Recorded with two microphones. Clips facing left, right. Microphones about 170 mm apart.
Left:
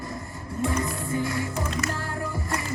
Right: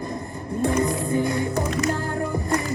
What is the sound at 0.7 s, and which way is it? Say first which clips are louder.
Music: right 6 dB; 20° right (ahead or behind).